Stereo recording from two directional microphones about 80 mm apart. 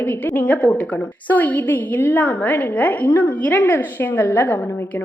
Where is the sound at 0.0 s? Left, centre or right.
Left.